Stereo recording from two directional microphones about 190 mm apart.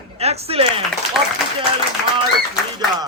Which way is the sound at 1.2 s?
Centre (ahead or behind).